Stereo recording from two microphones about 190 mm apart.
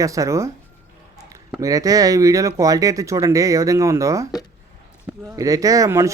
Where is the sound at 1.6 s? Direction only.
20° right (ahead or behind).